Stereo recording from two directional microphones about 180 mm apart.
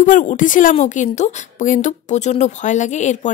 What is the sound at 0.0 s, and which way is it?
A woman's voice, 45° left (ahead or behind).